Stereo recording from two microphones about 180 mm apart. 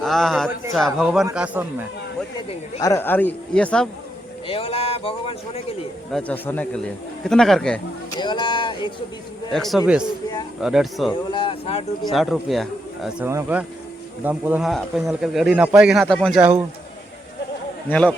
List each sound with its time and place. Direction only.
0.0 s speech: centre (ahead or behind)
2.8 s a man's voice: 15° left (ahead or behind)
4.4 s a man's voice: 30° left (ahead or behind)
6.1 s speech: 5° left (ahead or behind)
8.2 s speech: 25° left (ahead or behind)
9.5 s speech: centre (ahead or behind)
11.3 s a man's voice: 30° left (ahead or behind)
12.1 s speech: centre (ahead or behind)
16.4 s speech: 10° right (ahead or behind)
17.8 s a man's voice: 5° left (ahead or behind)